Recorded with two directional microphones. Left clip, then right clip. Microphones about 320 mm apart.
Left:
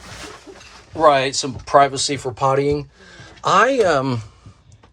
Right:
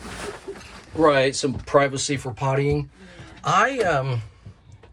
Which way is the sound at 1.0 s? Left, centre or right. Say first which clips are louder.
Left 3 dB; centre.